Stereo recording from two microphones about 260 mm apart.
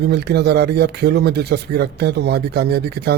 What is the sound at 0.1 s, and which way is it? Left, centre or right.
Speech, right.